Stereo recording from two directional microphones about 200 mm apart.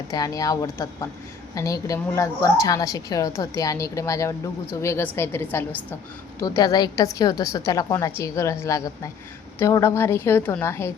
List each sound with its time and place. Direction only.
0.1 s a woman's voice: 15° left (ahead or behind)